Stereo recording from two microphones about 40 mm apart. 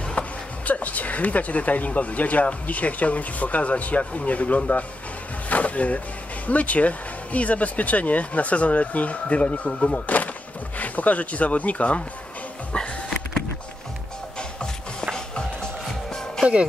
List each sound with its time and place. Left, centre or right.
0.2 s a sound: left
0.7 s speech: left
5.5 s music: left
6.4 s speech: left
10.8 s speech: left
12.7 s music: left
15.9 s music: centre